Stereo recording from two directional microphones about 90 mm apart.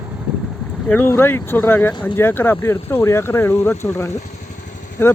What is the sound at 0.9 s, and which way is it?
Speech, 20° left (ahead or behind).